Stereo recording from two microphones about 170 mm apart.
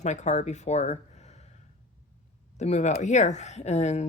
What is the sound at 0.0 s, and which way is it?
Speech, 45° left (ahead or behind).